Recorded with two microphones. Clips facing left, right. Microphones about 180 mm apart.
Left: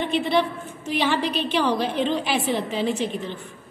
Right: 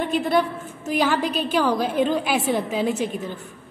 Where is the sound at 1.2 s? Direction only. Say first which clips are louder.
Right 1 dB; 45° right (ahead or behind).